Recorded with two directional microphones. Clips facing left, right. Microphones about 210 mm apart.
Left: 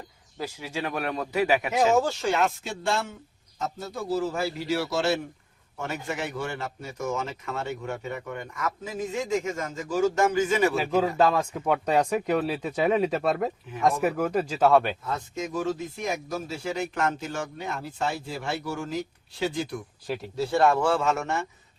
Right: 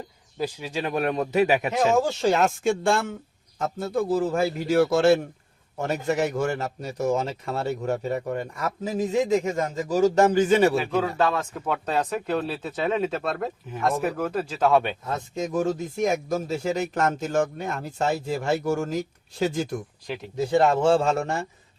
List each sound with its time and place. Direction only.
0.3 s speech: 15° right (ahead or behind)
2.2 s speech: 40° right (ahead or behind)
5.7 s a man's voice: 40° right (ahead or behind)
11.3 s speech: 10° left (ahead or behind)
15.4 s speech: 45° right (ahead or behind)
20.3 s speech: 20° right (ahead or behind)